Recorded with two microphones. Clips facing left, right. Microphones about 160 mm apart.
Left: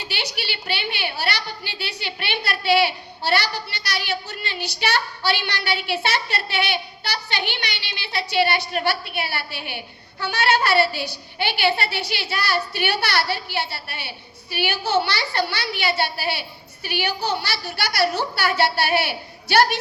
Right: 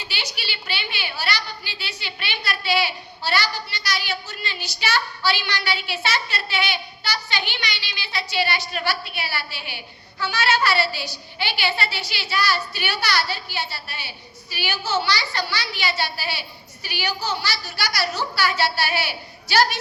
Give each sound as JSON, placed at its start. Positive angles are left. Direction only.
{"t": 0.0, "sound": "a woman's voice", "side_deg": 65}